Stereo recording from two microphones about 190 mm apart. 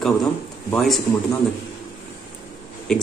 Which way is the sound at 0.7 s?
Centre (ahead or behind).